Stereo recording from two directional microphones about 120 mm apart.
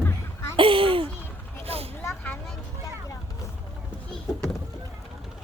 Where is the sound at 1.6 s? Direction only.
55° right (ahead or behind).